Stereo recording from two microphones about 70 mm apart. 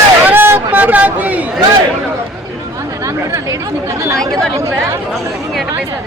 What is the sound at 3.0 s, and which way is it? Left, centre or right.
Chatter, right.